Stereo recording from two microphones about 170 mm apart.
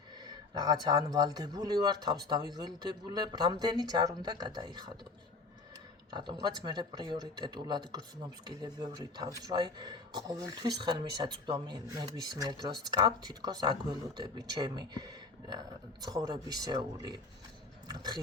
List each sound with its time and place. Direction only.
0.5 s speech: 25° right (ahead or behind)
6.1 s speech: 25° right (ahead or behind)